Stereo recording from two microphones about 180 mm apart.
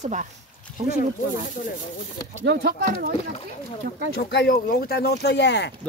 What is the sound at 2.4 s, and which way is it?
Speech, 65° right (ahead or behind).